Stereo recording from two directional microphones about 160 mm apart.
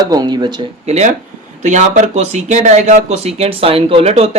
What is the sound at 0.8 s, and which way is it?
Speech, 45° right (ahead or behind).